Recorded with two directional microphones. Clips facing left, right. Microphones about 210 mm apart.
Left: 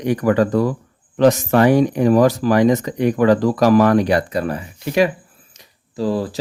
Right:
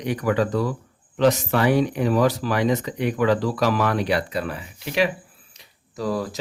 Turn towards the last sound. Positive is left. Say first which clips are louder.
# left 5 dB
turn(degrees=30)  # may be behind; listen again after turning